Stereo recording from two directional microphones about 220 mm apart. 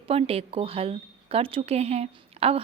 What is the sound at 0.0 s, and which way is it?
A woman's voice, 25° right (ahead or behind).